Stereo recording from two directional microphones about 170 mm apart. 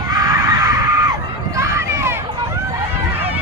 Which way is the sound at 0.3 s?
20° right (ahead or behind).